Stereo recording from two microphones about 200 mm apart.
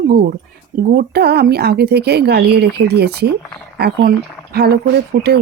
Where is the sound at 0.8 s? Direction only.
50° right (ahead or behind).